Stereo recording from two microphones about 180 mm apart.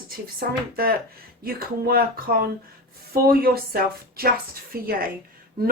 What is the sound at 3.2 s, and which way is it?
Speech, 55° right (ahead or behind).